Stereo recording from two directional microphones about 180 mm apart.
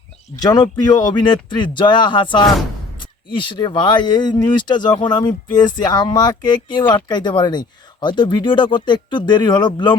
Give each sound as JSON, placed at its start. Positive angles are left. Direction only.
{"t": 0.4, "sound": "speech", "side_deg": 20}